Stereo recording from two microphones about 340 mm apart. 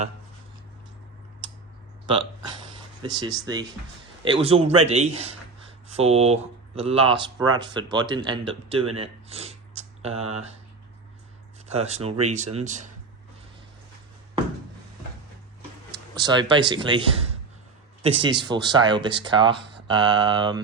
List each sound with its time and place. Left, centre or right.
3.0 s speech: centre
11.7 s speech: centre
15.9 s a man's voice: centre